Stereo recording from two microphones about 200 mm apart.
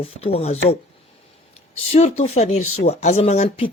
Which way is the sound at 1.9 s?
30° left (ahead or behind).